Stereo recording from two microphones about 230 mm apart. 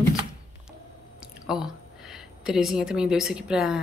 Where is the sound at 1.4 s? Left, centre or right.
Centre.